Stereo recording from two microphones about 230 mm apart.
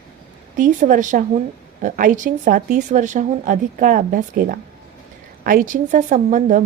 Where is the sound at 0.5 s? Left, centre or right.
Right.